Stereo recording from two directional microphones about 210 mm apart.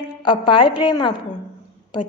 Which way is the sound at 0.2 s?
25° left (ahead or behind).